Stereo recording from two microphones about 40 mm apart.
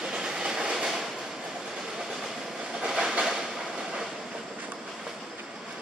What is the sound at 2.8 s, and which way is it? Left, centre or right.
Train, centre.